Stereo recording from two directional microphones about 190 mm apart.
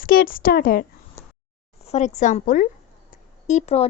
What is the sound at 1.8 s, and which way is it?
A woman's voice, 35° left (ahead or behind).